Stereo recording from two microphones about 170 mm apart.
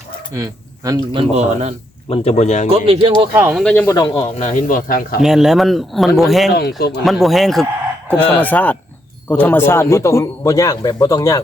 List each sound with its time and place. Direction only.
0.3 s speech: 20° right (ahead or behind)
1.1 s a man's voice: 40° right (ahead or behind)
2.0 s speech: 35° left (ahead or behind)
2.6 s a man's voice: 35° right (ahead or behind)
3.5 s speech: 5° left (ahead or behind)
3.8 s a man's voice: 25° left (ahead or behind)
4.4 s speech: 50° left (ahead or behind)
5.2 s speech: 5° right (ahead or behind)
6.5 s speech: 70° left (ahead or behind)
7.0 s speech: centre (ahead or behind); by 11.3 s 20° left (ahead or behind)